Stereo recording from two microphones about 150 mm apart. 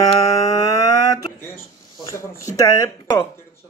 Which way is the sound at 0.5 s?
25° left (ahead or behind).